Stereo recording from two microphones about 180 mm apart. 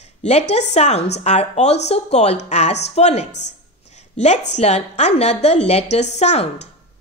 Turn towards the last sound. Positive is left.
turn(degrees=40)  # may be behind; listen again after turning